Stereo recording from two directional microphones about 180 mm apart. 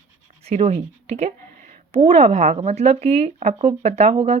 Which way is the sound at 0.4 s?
35° right (ahead or behind).